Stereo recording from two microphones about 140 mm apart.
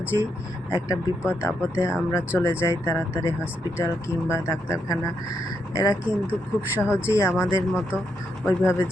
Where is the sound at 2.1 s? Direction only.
15° left (ahead or behind).